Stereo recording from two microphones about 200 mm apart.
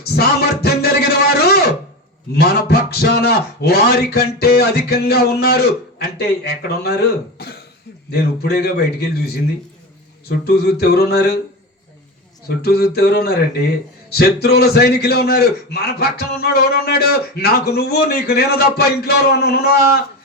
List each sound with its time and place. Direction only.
0.0 s a sound: 50° left (ahead or behind)
2.3 s a man's voice: 55° left (ahead or behind)
12.5 s a man's voice: 50° left (ahead or behind)